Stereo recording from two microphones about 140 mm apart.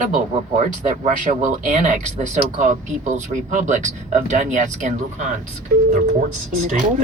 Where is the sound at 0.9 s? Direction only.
65° right (ahead or behind).